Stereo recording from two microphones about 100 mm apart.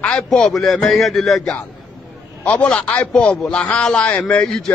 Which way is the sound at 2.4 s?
10° left (ahead or behind).